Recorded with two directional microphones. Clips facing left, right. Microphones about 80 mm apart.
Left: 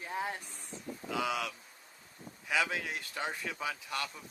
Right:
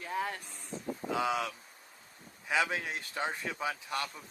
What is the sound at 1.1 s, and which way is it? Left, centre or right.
Speech, right.